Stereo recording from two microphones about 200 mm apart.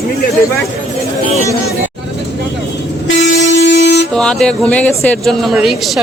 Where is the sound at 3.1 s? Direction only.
65° left (ahead or behind).